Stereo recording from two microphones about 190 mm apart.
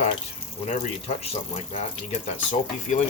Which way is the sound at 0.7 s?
30° left (ahead or behind).